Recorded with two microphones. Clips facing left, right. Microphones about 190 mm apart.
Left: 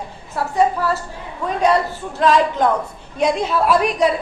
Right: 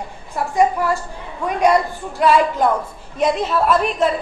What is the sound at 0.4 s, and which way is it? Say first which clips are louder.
A woman's voice: right 1 dB; 15° right (ahead or behind).